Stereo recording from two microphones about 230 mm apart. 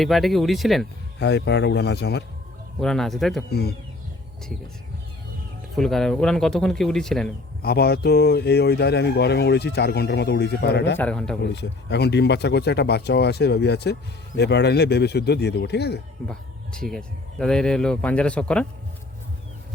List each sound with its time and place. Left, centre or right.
0.0 s speech: centre
1.2 s speech: left
2.8 s speech: centre
3.5 s speech: left
5.7 s speech: centre
7.6 s speech: left
10.9 s speech: centre
11.5 s speech: left
16.2 s speech: centre